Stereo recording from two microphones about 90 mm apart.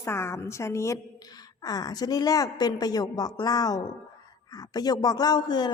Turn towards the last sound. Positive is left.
turn(degrees=50)  # may be behind; listen again after turning